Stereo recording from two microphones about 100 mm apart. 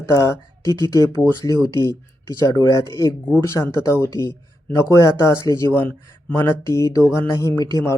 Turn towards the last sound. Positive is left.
turn(degrees=35)  # may be behind; listen again after turning